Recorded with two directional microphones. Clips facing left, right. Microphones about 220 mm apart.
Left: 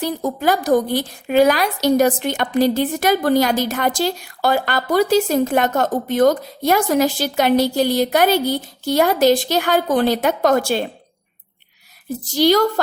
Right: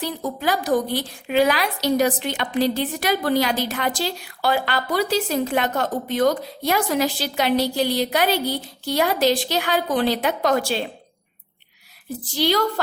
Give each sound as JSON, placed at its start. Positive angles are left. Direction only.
{"t": 0.0, "sound": "a woman's voice", "side_deg": 45}
{"t": 12.0, "sound": "a woman's voice", "side_deg": 45}